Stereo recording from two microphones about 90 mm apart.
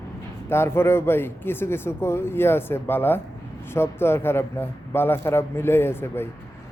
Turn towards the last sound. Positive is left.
turn(degrees=25)  # may be behind; listen again after turning